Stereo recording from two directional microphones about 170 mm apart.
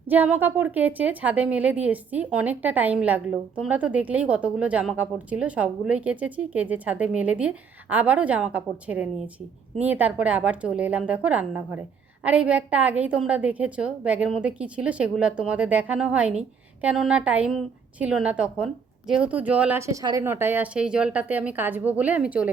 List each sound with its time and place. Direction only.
0.1 s a woman's voice: 10° right (ahead or behind)